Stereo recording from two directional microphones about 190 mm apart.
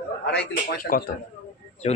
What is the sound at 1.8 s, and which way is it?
Speech, 35° left (ahead or behind).